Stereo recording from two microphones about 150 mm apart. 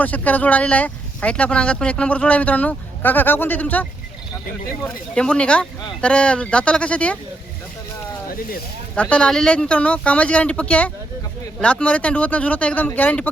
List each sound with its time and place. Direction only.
0.0 s speech: 10° left (ahead or behind)
8.3 s speech: 75° left (ahead or behind)
9.0 s speech: 10° left (ahead or behind)